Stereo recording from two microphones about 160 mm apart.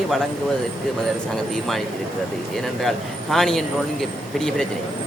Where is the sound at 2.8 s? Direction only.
Centre (ahead or behind).